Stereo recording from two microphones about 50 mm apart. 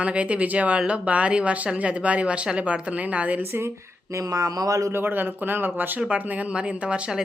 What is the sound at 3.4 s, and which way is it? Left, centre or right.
Speech, right.